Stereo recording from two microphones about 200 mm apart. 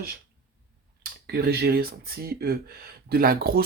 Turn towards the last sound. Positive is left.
turn(degrees=-45)  # may be behind; listen again after turning